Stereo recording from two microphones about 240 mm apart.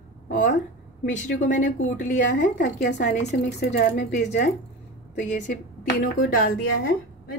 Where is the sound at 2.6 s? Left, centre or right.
Left.